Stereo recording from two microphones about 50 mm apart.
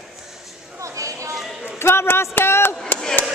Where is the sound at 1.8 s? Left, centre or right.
Left.